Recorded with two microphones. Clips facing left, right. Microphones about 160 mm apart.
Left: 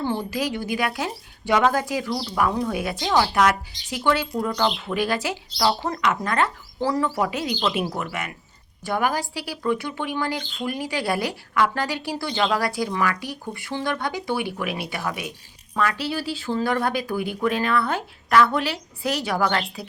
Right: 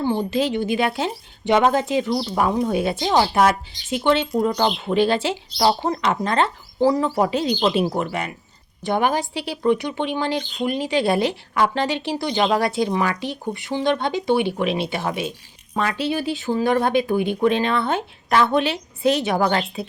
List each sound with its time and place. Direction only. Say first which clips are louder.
0.0 s speech: right 4 dB; 20° right (ahead or behind)